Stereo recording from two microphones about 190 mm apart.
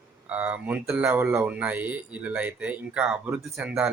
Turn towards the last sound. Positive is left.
turn(degrees=-10)  # may be behind; listen again after turning